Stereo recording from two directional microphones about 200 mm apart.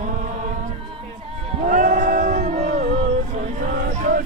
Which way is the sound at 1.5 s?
40° right (ahead or behind).